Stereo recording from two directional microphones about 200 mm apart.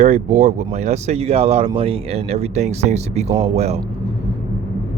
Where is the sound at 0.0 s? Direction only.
35° right (ahead or behind).